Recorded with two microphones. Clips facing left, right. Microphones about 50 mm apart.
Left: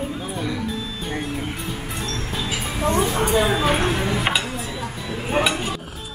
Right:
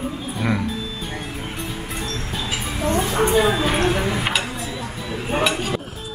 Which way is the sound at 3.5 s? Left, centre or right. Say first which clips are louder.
Even; centre.